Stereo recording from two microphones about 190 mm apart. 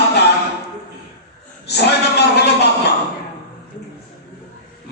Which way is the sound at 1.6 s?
60° left (ahead or behind).